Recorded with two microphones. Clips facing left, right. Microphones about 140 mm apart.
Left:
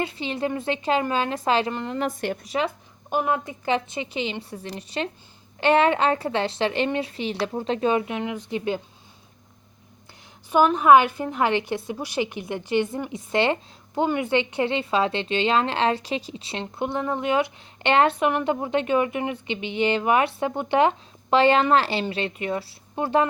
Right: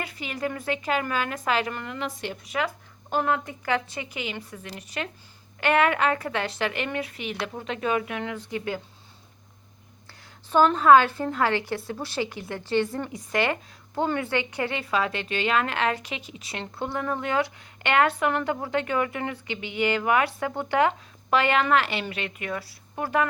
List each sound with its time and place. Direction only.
0.0 s a woman's voice: 25° left (ahead or behind)
2.0 s speech: 50° left (ahead or behind)
3.1 s a woman's voice: 15° left (ahead or behind)
10.5 s a woman's voice: 10° left (ahead or behind)